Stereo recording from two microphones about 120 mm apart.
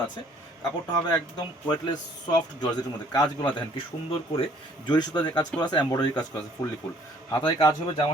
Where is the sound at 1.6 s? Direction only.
35° left (ahead or behind).